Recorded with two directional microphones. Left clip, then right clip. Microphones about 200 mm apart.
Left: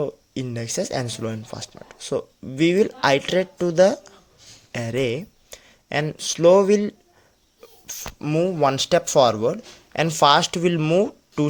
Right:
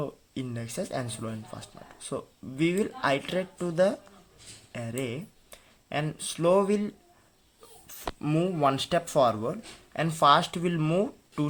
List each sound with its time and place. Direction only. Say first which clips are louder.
0.0 s speech: left 8 dB; 35° left (ahead or behind)